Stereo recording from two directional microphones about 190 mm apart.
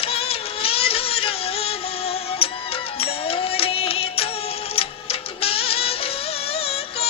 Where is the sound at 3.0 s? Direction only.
30° left (ahead or behind).